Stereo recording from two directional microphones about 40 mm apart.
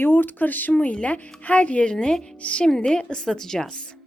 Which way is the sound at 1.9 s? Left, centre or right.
Left.